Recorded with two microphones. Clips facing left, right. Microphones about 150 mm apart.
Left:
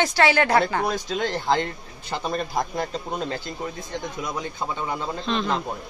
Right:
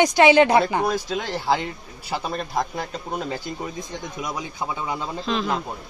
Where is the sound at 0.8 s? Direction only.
5° right (ahead or behind).